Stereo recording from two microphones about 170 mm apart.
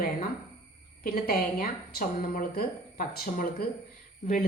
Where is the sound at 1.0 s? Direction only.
60° left (ahead or behind).